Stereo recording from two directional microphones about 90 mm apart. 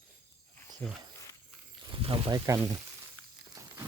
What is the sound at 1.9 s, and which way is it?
Snake, 90° right.